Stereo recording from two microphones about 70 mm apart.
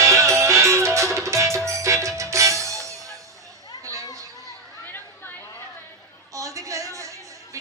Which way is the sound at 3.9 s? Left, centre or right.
Right.